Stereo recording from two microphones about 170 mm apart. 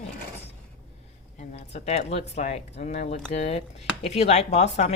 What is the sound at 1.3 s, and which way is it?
Speech, 40° left (ahead or behind).